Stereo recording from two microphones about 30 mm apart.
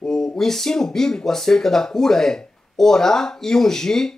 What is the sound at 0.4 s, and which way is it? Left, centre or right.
Speech, centre.